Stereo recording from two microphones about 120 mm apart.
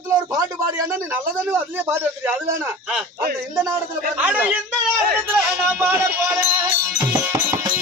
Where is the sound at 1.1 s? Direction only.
15° right (ahead or behind).